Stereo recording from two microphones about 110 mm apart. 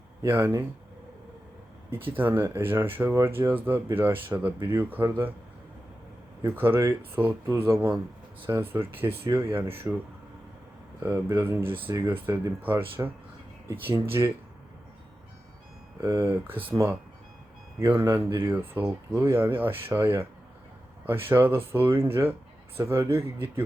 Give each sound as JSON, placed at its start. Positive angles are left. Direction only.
{"t": 0.2, "sound": "speech", "side_deg": -20}
{"t": 1.9, "sound": "speech", "side_deg": -20}
{"t": 6.4, "sound": "speech", "side_deg": -20}
{"t": 11.0, "sound": "speech", "side_deg": -20}
{"t": 16.0, "sound": "speech", "side_deg": -25}
{"t": 17.7, "sound": "speech", "side_deg": -20}